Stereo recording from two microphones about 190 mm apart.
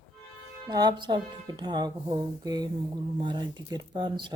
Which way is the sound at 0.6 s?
20° right (ahead or behind).